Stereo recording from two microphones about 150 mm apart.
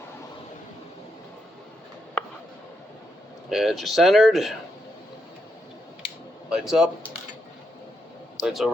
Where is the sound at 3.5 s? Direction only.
Centre (ahead or behind).